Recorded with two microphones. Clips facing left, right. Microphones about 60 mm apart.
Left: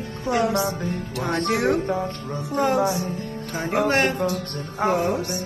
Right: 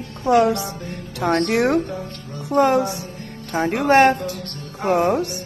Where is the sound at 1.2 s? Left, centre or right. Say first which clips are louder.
Right 5 dB; right.